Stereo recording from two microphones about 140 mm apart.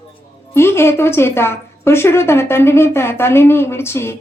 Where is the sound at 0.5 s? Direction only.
20° left (ahead or behind).